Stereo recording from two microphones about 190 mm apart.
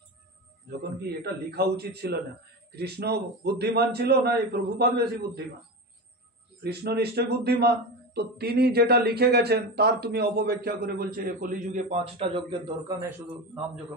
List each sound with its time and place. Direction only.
1.2 s a man's voice: 60° right (ahead or behind)
6.6 s a man's voice: 60° right (ahead or behind); by 12.9 s 25° right (ahead or behind)